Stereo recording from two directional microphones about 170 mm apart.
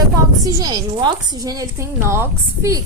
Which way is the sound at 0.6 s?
25° right (ahead or behind).